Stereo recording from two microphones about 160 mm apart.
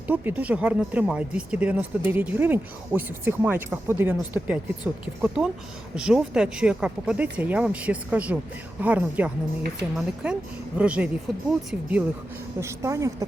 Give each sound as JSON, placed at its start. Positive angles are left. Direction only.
{"t": 0.1, "sound": "a woman's voice", "side_deg": -10}